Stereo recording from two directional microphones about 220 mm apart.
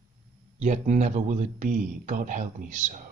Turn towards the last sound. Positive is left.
turn(degrees=-35)  # may be behind; listen again after turning